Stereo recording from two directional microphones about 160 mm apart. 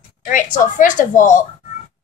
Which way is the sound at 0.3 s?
55° left (ahead or behind).